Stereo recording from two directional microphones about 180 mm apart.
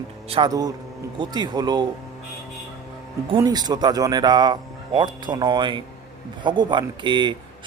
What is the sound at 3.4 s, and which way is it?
Speech, 20° right (ahead or behind).